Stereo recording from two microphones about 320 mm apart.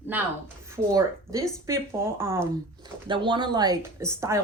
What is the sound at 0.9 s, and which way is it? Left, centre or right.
Speech, centre.